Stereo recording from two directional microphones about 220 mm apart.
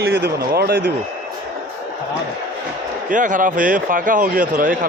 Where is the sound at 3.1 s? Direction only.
35° right (ahead or behind).